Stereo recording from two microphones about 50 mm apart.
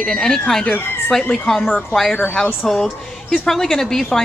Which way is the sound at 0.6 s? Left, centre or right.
Left.